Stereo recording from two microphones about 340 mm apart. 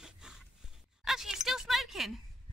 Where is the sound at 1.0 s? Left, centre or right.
Centre.